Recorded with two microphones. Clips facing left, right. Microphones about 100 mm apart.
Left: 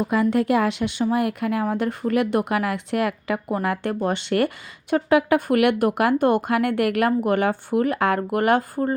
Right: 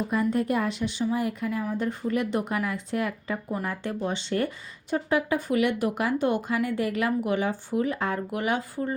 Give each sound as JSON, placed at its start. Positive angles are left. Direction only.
{"t": 0.0, "sound": "speech", "side_deg": 85}